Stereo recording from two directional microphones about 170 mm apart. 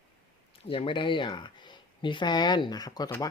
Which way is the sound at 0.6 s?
30° left (ahead or behind).